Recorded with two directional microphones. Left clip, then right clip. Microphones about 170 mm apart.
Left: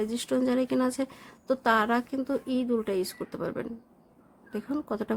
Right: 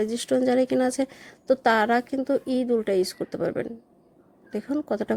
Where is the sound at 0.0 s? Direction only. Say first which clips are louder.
Right 5 dB; 15° right (ahead or behind).